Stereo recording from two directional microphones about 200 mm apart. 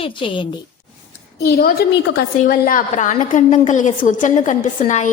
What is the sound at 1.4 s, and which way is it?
A woman's voice, 50° left (ahead or behind).